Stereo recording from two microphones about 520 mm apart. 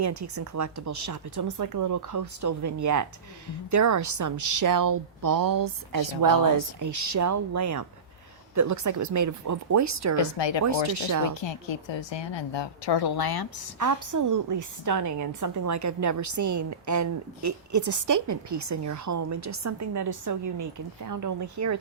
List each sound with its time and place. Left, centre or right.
0.0 s a woman's voice: right
10.2 s a woman's voice: left
10.9 s a woman's voice: right
11.3 s a woman's voice: left
13.7 s a woman's voice: right